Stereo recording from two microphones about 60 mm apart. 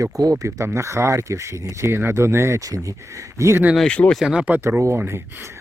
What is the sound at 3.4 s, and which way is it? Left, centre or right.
Speech, right.